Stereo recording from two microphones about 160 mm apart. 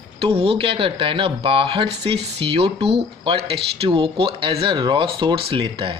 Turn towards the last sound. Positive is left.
turn(degrees=-35)  # may be behind; listen again after turning